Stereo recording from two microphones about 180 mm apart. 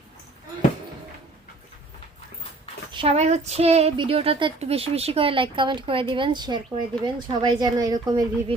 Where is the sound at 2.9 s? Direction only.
30° right (ahead or behind).